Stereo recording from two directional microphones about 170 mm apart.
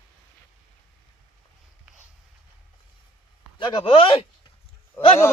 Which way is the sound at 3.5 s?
30° left (ahead or behind).